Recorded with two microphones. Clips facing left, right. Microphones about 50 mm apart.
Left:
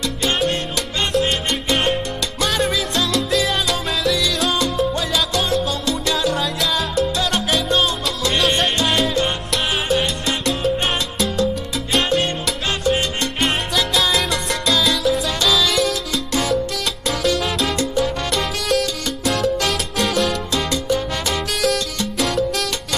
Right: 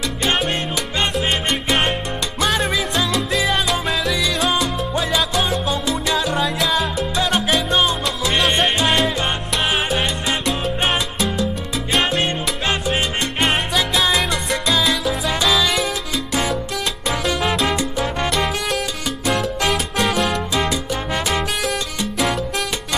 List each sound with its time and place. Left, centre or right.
0.2 s salsa music: centre
2.4 s music: centre
3.5 s music: centre
4.0 s salsa music: centre
11.1 s music: centre
11.9 s salsa music: centre
13.4 s music: centre
14.1 s salsa music: centre
15.2 s music: centre
17.3 s salsa music: centre
18.3 s music: centre
20.5 s salsa music: centre